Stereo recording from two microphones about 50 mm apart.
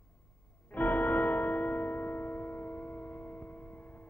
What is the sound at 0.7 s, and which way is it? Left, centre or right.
Music, left.